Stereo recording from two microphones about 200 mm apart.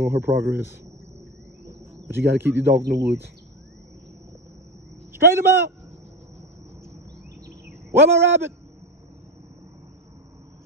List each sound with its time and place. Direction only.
0.0 s a man's voice: 10° right (ahead or behind)
1.7 s insect: 10° right (ahead or behind)
2.7 s speech: 50° right (ahead or behind)
5.1 s a man's voice: 10° right (ahead or behind)
7.9 s a man's voice: 10° right (ahead or behind)